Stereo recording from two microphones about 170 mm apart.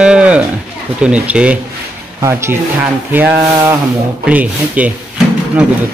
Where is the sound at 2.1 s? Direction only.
15° right (ahead or behind).